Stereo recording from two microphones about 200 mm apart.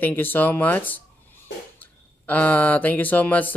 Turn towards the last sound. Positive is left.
turn(degrees=10)  # may be behind; listen again after turning